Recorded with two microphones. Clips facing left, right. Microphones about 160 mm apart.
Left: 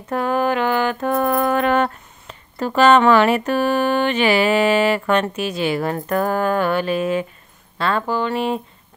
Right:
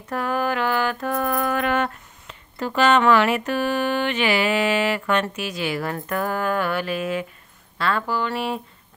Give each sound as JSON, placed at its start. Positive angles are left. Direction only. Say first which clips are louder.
{"t": 0.1, "sound": "mantra", "louder": "left 5 dB", "side_deg": 25}
{"t": 5.2, "sound": "speech", "louder": "left 5 dB", "side_deg": 30}